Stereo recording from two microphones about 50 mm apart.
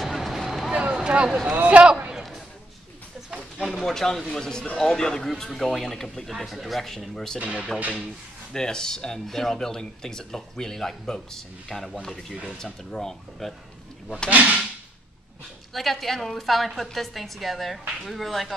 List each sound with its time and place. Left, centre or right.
0.0 s vehicle: centre
0.9 s a sound: centre
1.5 s a man's voice: right
3.6 s a woman's voice: centre
7.3 s speech: right
8.5 s speech: centre
14.3 s speech: right
15.7 s a woman's voice: centre